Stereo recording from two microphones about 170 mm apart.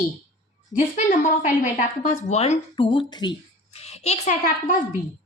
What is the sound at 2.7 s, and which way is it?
Speech, 30° left (ahead or behind).